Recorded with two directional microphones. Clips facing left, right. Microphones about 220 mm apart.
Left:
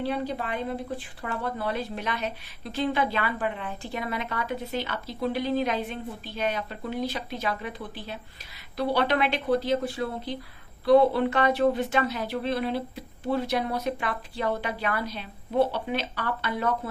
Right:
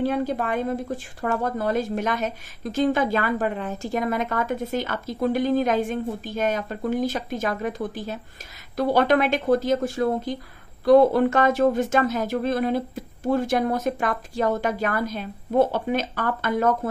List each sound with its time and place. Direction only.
0.0 s speech: 45° right (ahead or behind)